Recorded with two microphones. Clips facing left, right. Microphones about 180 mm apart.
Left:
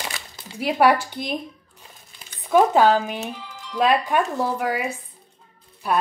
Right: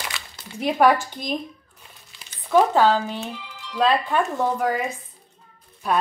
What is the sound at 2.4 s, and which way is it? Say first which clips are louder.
A woman's voice: left 1 dB; 15° left (ahead or behind).